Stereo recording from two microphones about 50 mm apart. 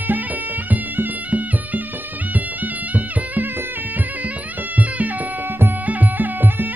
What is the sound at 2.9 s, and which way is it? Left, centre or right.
Music, right.